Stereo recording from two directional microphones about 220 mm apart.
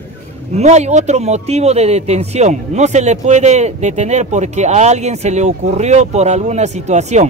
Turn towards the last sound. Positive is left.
turn(degrees=-30)  # may be behind; listen again after turning